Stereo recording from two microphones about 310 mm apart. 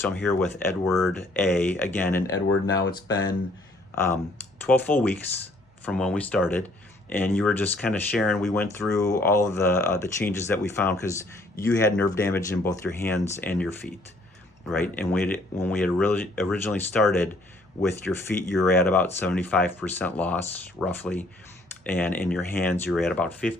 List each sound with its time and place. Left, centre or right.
0.0 s speech: centre
3.9 s speech: centre